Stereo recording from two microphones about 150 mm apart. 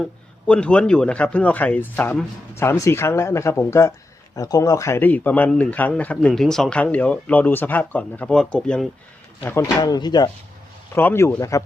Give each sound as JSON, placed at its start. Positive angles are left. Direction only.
{"t": 0.0, "sound": "speech", "side_deg": 10}
{"t": 9.8, "sound": "speech", "side_deg": 25}
{"t": 10.9, "sound": "speech", "side_deg": 15}